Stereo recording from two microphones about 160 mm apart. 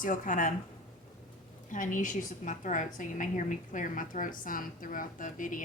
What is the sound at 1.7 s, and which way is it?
A woman's voice, 55° left (ahead or behind).